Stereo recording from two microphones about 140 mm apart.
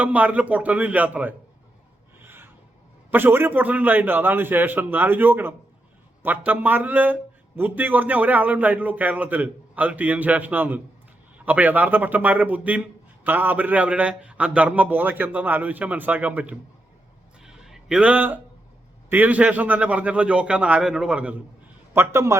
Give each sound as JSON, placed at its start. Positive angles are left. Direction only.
{"t": 0.0, "sound": "a man's voice", "side_deg": -10}
{"t": 2.2, "sound": "filing", "side_deg": -15}
{"t": 3.1, "sound": "a man's voice", "side_deg": -15}
{"t": 17.4, "sound": "a sound", "side_deg": -5}
{"t": 19.1, "sound": "a man's voice", "side_deg": -10}
{"t": 21.9, "sound": "a man's voice", "side_deg": -20}